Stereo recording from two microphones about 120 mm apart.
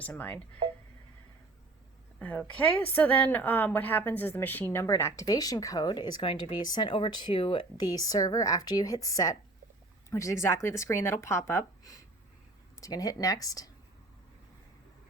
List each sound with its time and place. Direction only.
0.2 s a woman's voice: 10° left (ahead or behind)
2.1 s a woman's voice: 15° left (ahead or behind); by 13.7 s 30° left (ahead or behind)